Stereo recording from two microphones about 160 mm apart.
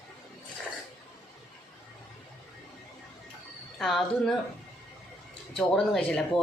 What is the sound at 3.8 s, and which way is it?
Speech, centre (ahead or behind).